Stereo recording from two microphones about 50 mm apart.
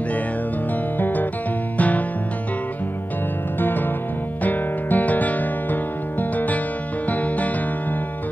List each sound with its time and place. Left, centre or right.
0.9 s music: left
3.5 s music: left